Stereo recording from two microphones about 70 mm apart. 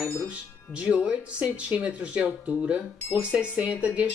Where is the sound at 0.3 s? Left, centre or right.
Centre.